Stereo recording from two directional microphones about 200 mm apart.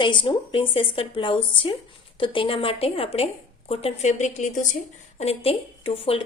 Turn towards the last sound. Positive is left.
turn(degrees=30)  # may be behind; listen again after turning